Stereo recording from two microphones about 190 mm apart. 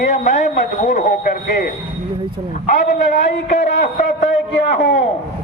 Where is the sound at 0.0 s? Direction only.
40° left (ahead or behind).